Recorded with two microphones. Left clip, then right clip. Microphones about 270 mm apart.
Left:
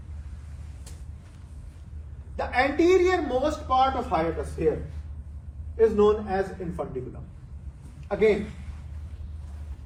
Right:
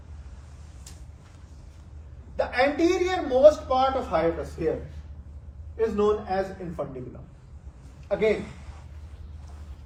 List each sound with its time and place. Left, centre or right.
2.3 s a sound: centre
2.7 s a man's voice: centre
8.0 s a man's voice: centre